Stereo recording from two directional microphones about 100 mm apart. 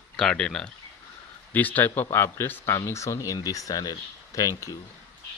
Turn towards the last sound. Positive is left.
turn(degrees=35)  # may be behind; listen again after turning